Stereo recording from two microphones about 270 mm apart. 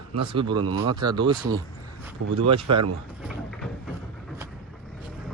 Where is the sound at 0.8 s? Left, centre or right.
Centre.